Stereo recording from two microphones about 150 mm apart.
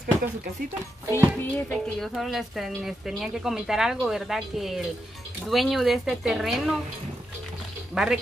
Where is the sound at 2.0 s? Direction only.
Centre (ahead or behind).